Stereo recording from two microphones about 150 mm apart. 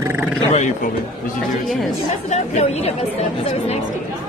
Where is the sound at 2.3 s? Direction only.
45° left (ahead or behind).